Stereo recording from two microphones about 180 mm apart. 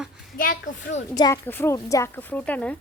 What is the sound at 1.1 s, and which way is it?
A child's voice, 20° left (ahead or behind).